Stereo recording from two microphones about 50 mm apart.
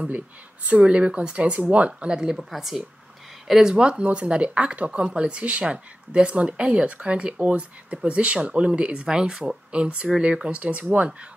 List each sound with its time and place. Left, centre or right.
0.7 s speech: right
1.9 s speech: centre
2.5 s speech: centre
3.7 s speech: centre